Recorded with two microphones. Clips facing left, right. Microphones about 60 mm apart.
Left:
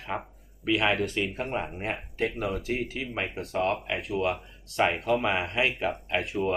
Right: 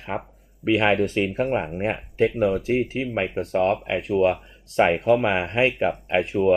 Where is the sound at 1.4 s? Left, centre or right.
Right.